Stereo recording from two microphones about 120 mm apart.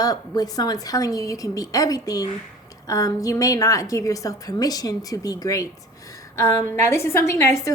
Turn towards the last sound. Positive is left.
turn(degrees=25)  # may be behind; listen again after turning